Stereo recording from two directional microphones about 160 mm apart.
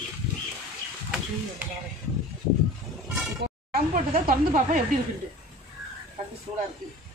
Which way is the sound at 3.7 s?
65° right (ahead or behind).